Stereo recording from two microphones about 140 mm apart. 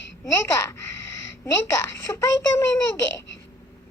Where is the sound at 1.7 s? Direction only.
20° left (ahead or behind).